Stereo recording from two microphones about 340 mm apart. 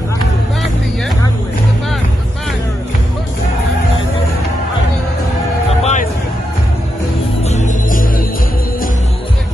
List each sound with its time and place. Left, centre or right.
5.7 s music: centre
7.4 s music: left